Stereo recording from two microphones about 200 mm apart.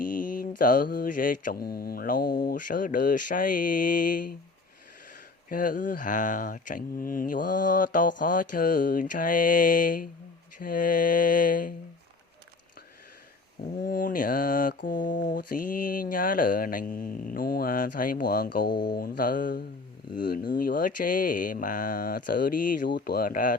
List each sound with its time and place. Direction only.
0.6 s speech: 45° left (ahead or behind)
5.5 s speech: 45° left (ahead or behind)
13.8 s speech: 45° left (ahead or behind)
18.7 s speech: 20° left (ahead or behind)
18.9 s speech: 45° left (ahead or behind)